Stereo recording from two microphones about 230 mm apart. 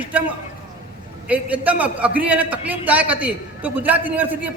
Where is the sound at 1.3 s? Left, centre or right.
Centre.